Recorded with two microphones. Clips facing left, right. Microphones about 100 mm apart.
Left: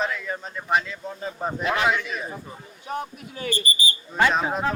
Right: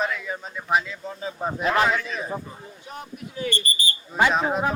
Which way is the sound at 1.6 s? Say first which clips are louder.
Right 3 dB; 40° right (ahead or behind).